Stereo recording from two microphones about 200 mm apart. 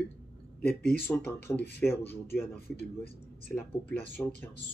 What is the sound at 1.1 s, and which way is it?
Speech, 10° left (ahead or behind).